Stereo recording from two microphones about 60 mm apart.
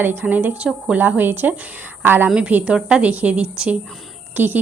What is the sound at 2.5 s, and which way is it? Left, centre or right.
A woman's voice, centre.